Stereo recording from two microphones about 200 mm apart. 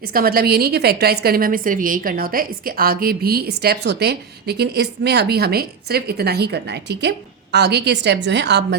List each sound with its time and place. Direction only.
0.0 s a woman's voice: 50° right (ahead or behind)